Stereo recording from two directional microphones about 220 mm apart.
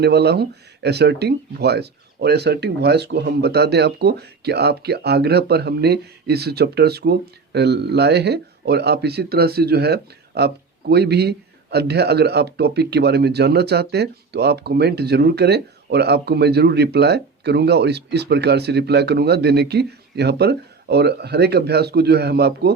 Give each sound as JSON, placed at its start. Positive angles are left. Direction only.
{"t": 0.0, "sound": "speech", "side_deg": -50}